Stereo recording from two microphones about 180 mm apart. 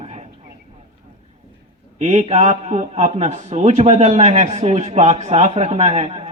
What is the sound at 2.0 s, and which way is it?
A man's voice, 40° right (ahead or behind).